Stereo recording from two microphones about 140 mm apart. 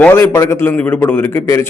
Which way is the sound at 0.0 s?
15° left (ahead or behind).